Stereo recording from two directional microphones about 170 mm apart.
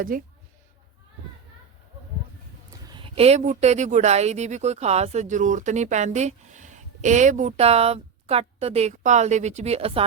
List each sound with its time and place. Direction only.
0.1 s speech: 55° right (ahead or behind)
2.8 s speech: 30° right (ahead or behind)